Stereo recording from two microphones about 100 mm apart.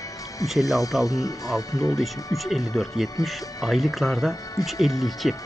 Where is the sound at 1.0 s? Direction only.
35° left (ahead or behind).